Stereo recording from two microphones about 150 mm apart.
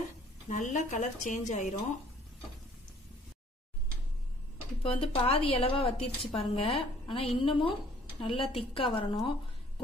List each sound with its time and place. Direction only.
0.5 s speech: 55° left (ahead or behind)
4.8 s a woman's voice: 40° left (ahead or behind)